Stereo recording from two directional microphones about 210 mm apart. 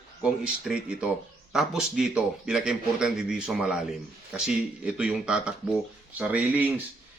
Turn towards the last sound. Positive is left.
turn(degrees=-10)  # may be behind; listen again after turning